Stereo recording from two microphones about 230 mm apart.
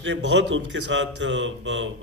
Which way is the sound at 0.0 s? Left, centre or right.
Right.